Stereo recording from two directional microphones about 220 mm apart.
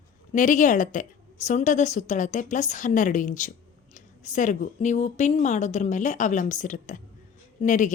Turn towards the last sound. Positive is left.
turn(degrees=35)  # may be behind; listen again after turning